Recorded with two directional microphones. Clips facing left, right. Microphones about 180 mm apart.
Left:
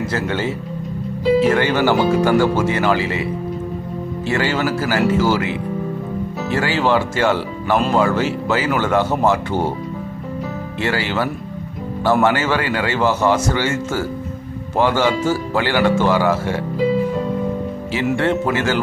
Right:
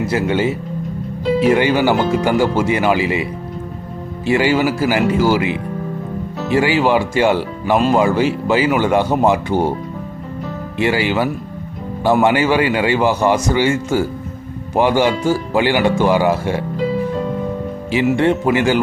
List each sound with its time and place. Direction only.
0.0 s speech: 15° right (ahead or behind)
4.3 s speech: 15° right (ahead or behind)
10.8 s speech: 15° right (ahead or behind)
17.9 s speech: 15° right (ahead or behind)